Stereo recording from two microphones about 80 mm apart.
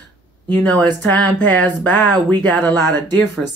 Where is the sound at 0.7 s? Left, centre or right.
Centre.